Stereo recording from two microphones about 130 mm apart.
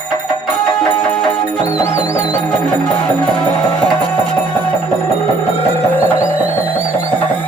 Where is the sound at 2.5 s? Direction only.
5° left (ahead or behind).